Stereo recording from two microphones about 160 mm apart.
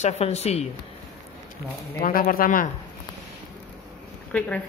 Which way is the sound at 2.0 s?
60° left (ahead or behind).